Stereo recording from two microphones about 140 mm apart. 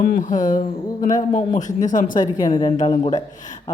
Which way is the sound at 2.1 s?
25° left (ahead or behind).